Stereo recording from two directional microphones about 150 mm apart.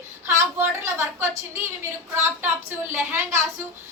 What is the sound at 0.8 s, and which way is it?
Speech, 15° right (ahead or behind).